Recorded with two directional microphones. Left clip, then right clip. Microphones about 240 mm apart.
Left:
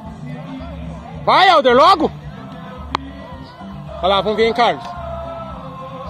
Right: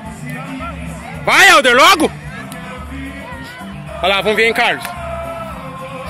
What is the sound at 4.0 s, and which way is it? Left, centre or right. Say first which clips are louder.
Speech: right 2 dB; centre.